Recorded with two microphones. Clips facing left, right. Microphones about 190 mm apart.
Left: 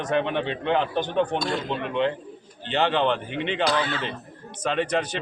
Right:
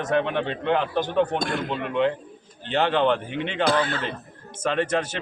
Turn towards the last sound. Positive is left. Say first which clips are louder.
# even
turn(degrees=-5)  # may be behind; listen again after turning